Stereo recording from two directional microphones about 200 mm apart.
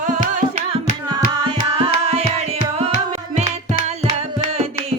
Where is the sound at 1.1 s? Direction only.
25° right (ahead or behind).